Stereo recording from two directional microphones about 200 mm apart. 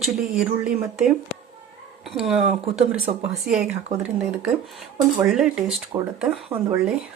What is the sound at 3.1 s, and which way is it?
Speech, 35° right (ahead or behind).